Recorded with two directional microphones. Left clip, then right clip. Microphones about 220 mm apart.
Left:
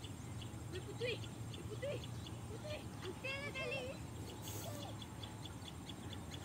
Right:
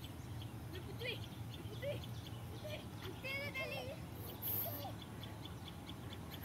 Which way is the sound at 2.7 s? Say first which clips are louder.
Left 1 dB; 45° right (ahead or behind).